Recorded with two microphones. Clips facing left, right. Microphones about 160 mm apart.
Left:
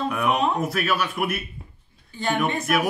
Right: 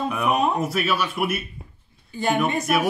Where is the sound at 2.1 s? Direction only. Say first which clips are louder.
Right 2 dB; 20° right (ahead or behind).